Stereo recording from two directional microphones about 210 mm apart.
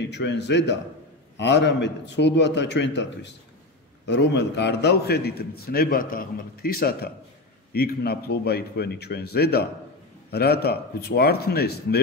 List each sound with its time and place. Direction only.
0.1 s a man's voice: 55° left (ahead or behind)